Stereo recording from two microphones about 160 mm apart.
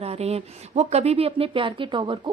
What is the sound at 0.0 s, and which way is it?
Speech, 40° right (ahead or behind).